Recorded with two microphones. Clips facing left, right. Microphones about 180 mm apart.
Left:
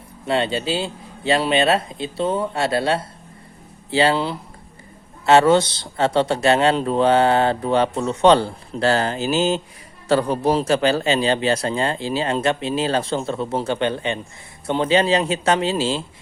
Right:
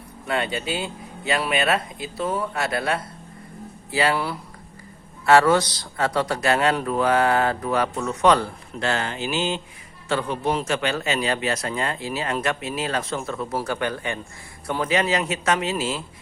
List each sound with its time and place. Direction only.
0.3 s speech: 25° left (ahead or behind)